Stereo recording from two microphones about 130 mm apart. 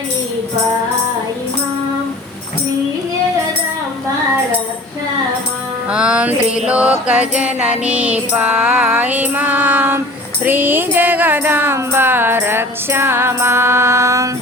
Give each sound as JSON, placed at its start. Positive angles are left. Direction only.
{"t": 5.9, "sound": "mantra", "side_deg": -5}